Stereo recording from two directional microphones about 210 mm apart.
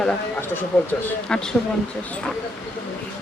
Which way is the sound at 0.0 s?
10° left (ahead or behind).